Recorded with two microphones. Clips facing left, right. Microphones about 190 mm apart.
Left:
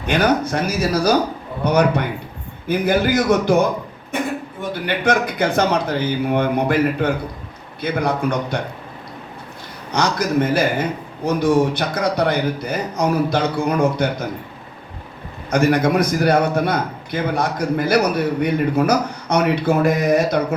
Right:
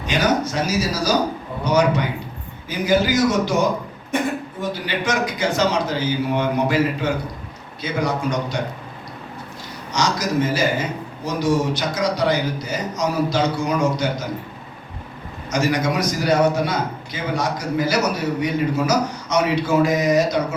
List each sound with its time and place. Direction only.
0.0 s a man's voice: 55° left (ahead or behind)
4.7 s a man's voice: 55° left (ahead or behind)
9.9 s a man's voice: 55° left (ahead or behind)
15.4 s a man's voice: 55° left (ahead or behind)